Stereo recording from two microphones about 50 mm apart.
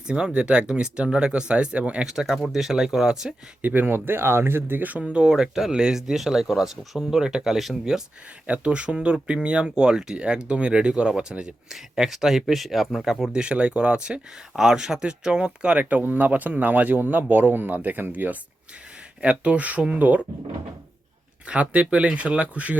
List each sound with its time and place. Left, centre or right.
0.3 s speech: centre
2.0 s speech: centre
3.6 s speech: right
3.8 s speech: right
4.8 s speech: right
5.3 s speech: centre
8.4 s speech: right
14.5 s speech: centre
15.8 s speech: right
19.2 s speech: right
21.4 s speech: right